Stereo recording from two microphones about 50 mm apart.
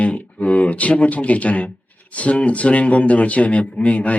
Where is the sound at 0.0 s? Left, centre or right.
Left.